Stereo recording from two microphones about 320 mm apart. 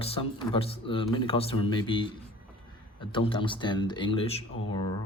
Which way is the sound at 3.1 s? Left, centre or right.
Centre.